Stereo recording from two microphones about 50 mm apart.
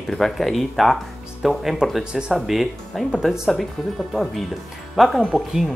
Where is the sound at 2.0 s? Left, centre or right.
Centre.